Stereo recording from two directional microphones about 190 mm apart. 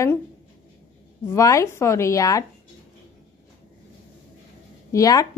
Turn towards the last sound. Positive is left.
turn(degrees=20)  # may be behind; listen again after turning